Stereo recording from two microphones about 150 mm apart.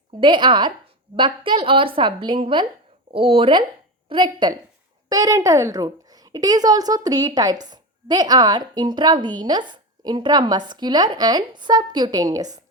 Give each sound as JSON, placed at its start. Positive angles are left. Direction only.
{"t": 0.2, "sound": "a woman's voice", "side_deg": -30}